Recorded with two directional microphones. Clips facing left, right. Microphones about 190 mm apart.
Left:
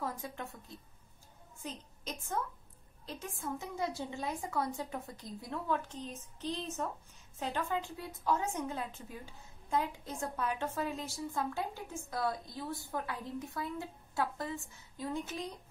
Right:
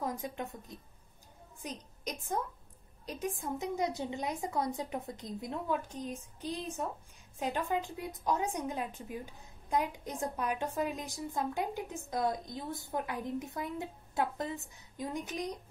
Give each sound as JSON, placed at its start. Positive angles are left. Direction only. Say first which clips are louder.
{"t": 0.0, "sound": "a woman's voice", "louder": "right 3 dB", "side_deg": -20}